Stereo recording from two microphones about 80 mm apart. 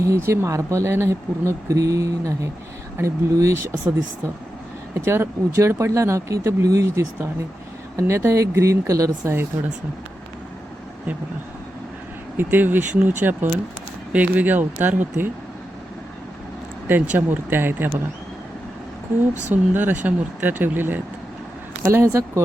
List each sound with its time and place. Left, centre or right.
0.0 s speech: right
4.9 s speech: right
12.4 s speech: right
16.9 s speech: right
19.7 s speech: right